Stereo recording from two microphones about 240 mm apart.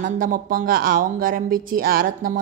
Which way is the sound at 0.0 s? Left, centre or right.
Right.